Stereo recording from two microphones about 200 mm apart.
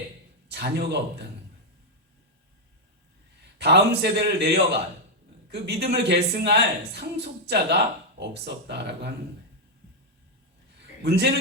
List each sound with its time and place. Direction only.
0.5 s speech: 55° right (ahead or behind)
3.6 s speech: 55° right (ahead or behind)
11.0 s a man's voice: 55° right (ahead or behind)